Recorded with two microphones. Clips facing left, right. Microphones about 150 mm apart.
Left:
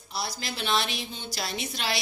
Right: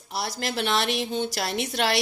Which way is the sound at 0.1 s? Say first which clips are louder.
Right 5 dB; 75° right (ahead or behind).